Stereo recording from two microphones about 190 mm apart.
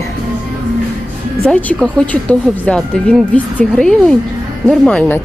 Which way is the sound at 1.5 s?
5° left (ahead or behind).